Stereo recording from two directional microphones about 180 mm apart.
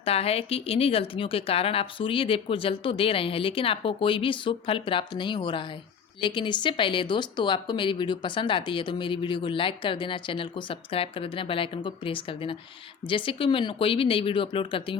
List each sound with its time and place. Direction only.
0.0 s speech: 35° left (ahead or behind)